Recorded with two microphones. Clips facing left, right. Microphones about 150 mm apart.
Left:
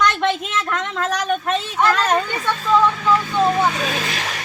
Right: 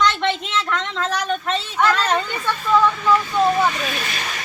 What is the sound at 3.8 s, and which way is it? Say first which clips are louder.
Speech: left 3 dB; 90° left.